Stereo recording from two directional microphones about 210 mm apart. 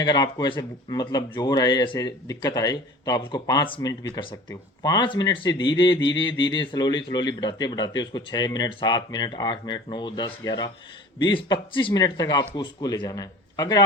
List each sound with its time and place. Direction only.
0.0 s speech: 20° left (ahead or behind)